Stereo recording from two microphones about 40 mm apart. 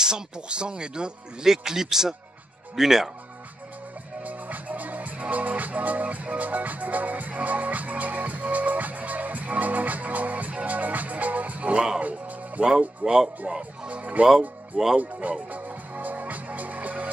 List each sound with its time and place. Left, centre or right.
0.0 s speech: right
4.2 s music: right
12.6 s speech: centre
13.5 s speech: right
15.5 s music: right